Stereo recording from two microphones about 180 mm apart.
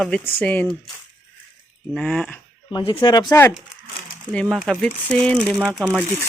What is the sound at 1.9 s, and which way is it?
Speech, 5° left (ahead or behind).